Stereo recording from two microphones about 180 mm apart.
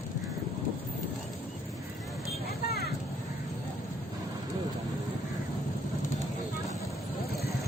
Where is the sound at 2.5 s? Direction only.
60° left (ahead or behind).